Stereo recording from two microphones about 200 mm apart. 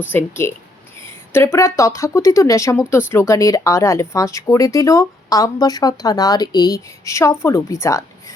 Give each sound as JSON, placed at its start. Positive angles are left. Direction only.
{"t": 0.1, "sound": "speech", "side_deg": 10}
{"t": 1.0, "sound": "a sound", "side_deg": 10}
{"t": 1.5, "sound": "speech", "side_deg": 15}